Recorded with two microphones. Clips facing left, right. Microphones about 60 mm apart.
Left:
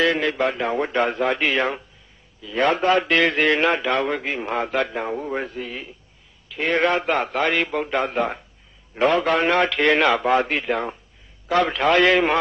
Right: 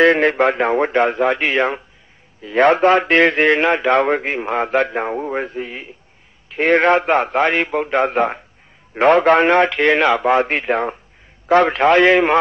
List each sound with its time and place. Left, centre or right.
0.0 s a man's voice: right
2.4 s speech: right
6.5 s speech: right
7.9 s a man's voice: right; by 10.2 s centre
10.2 s speech: right